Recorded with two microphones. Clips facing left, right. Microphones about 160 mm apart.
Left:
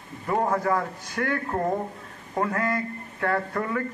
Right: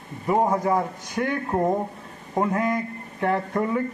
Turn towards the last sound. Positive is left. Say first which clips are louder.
# right 3 dB
turn(degrees=-20)  # may be behind; listen again after turning